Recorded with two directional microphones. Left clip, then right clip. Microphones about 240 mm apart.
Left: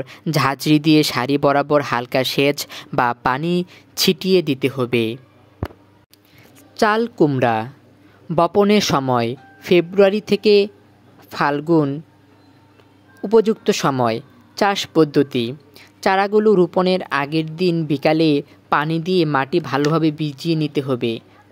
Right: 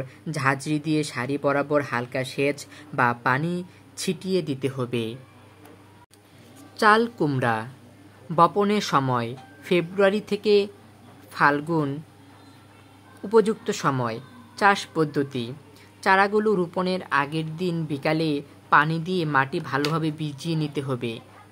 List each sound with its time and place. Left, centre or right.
0.0 s speech: left
6.8 s speech: left
13.3 s speech: left